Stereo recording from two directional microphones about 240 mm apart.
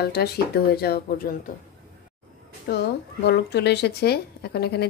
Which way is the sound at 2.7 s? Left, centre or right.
Left.